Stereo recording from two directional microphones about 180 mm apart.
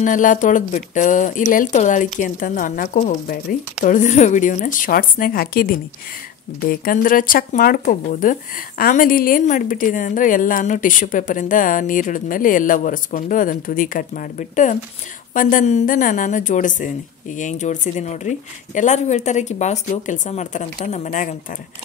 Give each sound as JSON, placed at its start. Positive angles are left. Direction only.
{"t": 0.0, "sound": "speech", "side_deg": 45}